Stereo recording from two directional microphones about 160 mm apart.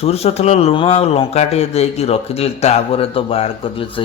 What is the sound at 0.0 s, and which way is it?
A man's voice, 40° left (ahead or behind).